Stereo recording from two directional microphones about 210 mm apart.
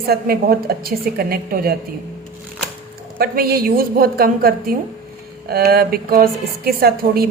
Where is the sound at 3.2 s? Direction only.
45° right (ahead or behind).